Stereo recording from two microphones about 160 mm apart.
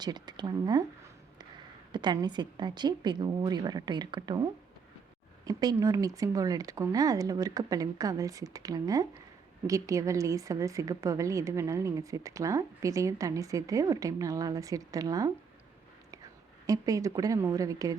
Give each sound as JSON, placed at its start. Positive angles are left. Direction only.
{"t": 0.0, "sound": "a woman's voice", "side_deg": -25}
{"t": 5.5, "sound": "a woman's voice", "side_deg": -25}
{"t": 16.6, "sound": "a woman's voice", "side_deg": -20}